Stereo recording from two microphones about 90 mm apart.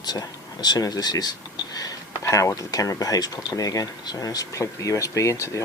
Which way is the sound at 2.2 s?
35° left (ahead or behind).